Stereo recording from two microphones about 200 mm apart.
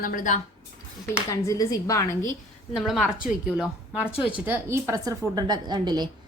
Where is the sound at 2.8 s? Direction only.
Centre (ahead or behind).